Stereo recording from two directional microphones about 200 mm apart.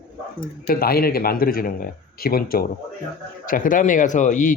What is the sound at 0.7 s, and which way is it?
Speech, 50° left (ahead or behind).